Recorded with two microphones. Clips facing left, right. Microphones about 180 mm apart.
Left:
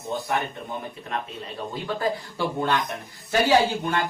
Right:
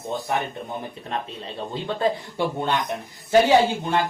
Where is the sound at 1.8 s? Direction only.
25° right (ahead or behind).